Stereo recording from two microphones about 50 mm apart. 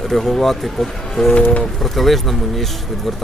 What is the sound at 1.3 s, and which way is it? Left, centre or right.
Speech, left.